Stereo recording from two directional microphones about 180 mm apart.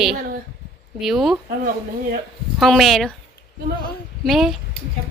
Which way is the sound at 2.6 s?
Centre (ahead or behind).